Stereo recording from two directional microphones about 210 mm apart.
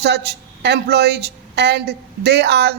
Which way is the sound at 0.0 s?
50° right (ahead or behind).